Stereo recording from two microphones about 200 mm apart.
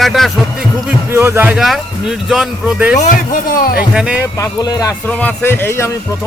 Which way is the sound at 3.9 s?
5° right (ahead or behind).